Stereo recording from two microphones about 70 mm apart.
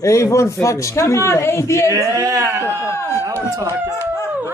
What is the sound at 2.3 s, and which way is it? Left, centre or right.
Speech, right.